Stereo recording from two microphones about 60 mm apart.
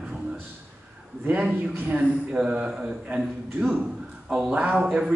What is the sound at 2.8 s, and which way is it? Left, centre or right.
Speech, right.